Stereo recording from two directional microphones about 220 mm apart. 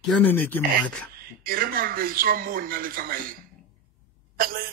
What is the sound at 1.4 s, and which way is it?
A woman's voice, 40° right (ahead or behind).